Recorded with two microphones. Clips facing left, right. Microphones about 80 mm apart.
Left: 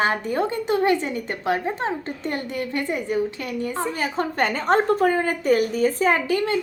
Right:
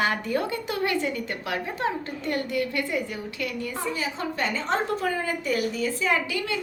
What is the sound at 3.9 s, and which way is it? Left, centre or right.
A woman's voice, left.